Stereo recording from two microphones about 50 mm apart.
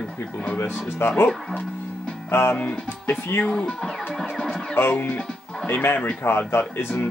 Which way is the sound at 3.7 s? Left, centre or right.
Centre.